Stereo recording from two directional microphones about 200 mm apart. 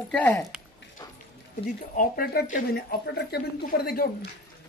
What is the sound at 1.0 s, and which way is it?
Clip-clop, 15° left (ahead or behind).